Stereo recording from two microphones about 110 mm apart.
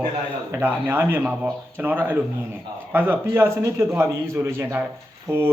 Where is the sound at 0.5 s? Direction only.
20° right (ahead or behind).